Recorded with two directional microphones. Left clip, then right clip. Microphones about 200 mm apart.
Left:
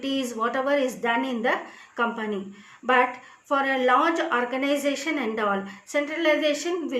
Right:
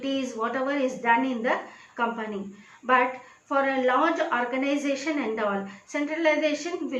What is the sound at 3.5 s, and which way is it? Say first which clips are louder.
A woman's voice: left 2 dB; 45° left (ahead or behind).